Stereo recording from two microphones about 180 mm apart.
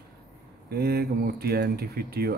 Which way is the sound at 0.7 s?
60° right (ahead or behind).